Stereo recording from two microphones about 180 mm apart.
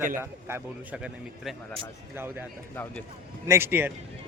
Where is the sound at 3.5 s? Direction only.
15° right (ahead or behind).